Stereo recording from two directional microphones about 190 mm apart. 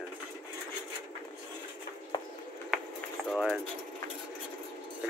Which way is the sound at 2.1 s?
20° left (ahead or behind).